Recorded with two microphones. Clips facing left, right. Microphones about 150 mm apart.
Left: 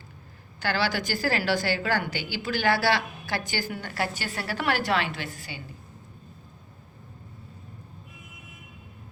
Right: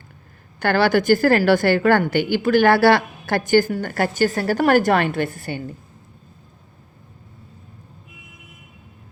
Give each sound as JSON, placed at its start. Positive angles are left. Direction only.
{"t": 0.6, "sound": "a woman's voice", "side_deg": -55}